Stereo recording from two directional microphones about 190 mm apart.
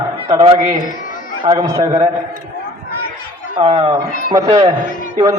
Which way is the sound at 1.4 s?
20° right (ahead or behind).